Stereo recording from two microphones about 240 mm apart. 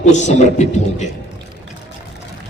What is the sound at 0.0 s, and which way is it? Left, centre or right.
A man's voice, left.